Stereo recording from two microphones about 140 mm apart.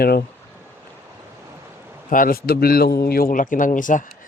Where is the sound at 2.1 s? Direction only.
85° left; by 4.0 s 70° left (ahead or behind).